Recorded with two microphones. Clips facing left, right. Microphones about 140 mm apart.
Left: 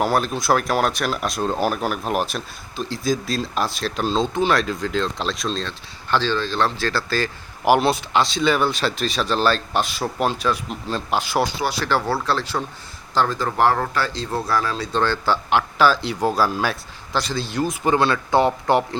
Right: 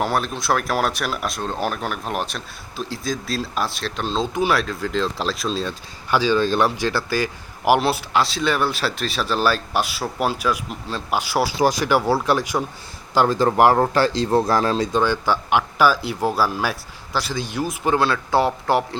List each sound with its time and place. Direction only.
0.0 s speech: centre (ahead or behind)
4.4 s a man's voice: 10° right (ahead or behind)
4.6 s a man's voice: centre (ahead or behind)
13.7 s speech: 35° right (ahead or behind)
14.9 s a man's voice: 15° right (ahead or behind)